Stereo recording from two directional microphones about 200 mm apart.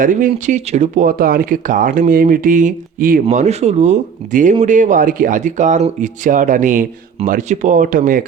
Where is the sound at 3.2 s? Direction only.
35° right (ahead or behind).